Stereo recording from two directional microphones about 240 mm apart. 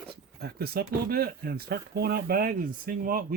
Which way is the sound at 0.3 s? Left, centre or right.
Right.